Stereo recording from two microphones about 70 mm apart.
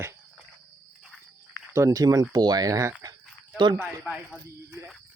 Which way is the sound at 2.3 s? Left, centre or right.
Right.